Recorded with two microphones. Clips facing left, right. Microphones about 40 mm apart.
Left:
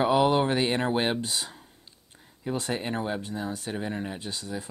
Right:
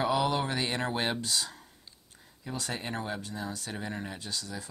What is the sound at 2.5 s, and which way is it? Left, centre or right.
Speech, left.